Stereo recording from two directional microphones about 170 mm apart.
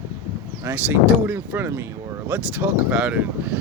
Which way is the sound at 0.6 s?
10° right (ahead or behind).